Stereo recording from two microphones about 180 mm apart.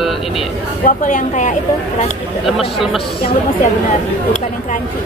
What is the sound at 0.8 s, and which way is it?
Speech, 45° left (ahead or behind).